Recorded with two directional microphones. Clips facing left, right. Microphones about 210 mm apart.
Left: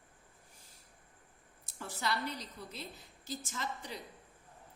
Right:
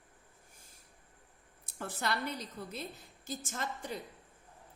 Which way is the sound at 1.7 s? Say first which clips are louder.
Right 1 dB; 55° right (ahead or behind).